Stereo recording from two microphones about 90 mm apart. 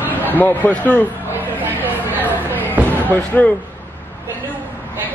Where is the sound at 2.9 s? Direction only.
20° left (ahead or behind).